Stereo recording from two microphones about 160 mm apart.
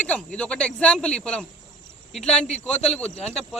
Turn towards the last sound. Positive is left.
turn(degrees=5)  # may be behind; listen again after turning